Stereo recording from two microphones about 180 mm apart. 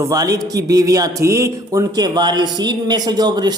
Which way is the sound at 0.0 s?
20° right (ahead or behind).